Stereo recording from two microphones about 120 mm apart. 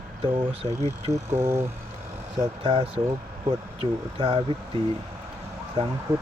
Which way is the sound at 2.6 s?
50° right (ahead or behind).